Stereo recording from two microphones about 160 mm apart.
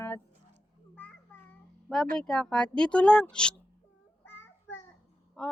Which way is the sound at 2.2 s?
5° left (ahead or behind).